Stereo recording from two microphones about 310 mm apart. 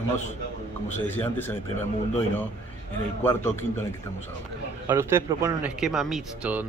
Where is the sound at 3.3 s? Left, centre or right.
Centre.